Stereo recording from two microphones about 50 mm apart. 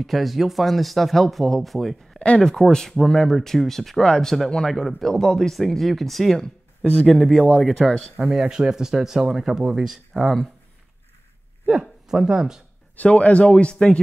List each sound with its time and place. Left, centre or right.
0.0 s speech: centre
2.1 s speech: left
2.5 s speech: centre
8.2 s speech: centre
11.8 s speech: centre
12.9 s speech: left